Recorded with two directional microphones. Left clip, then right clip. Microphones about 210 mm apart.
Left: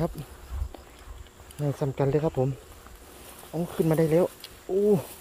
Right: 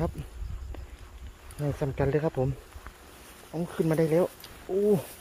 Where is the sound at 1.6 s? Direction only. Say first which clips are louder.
Left 2 dB; 5° left (ahead or behind).